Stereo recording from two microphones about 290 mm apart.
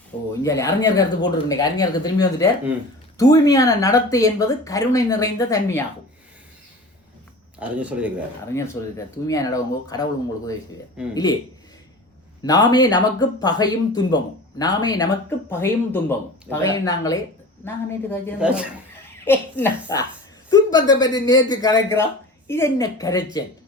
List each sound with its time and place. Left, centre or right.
0.4 s speech: centre
7.6 s speech: centre
8.4 s speech: centre
12.4 s speech: centre
18.3 s speech: centre
19.2 s speech: centre